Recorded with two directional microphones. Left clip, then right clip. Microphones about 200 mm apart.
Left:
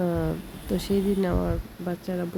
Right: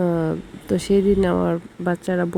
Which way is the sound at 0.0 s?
20° right (ahead or behind).